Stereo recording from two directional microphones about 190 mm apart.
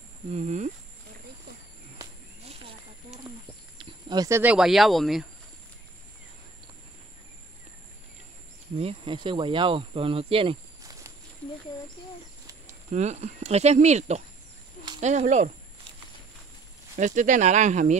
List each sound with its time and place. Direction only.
0.3 s speech: 40° right (ahead or behind)
3.1 s a sound: centre (ahead or behind)
4.1 s speech: 15° right (ahead or behind); by 5.2 s centre (ahead or behind)
8.7 s speech: 30° right (ahead or behind)
12.9 s speech: 35° right (ahead or behind)
16.9 s speech: 40° right (ahead or behind)